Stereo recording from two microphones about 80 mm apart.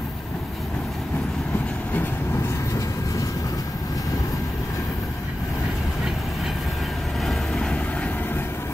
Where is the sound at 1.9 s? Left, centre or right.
Left.